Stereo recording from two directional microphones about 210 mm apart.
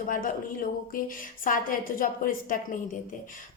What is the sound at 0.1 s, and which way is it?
A woman's voice, 40° left (ahead or behind).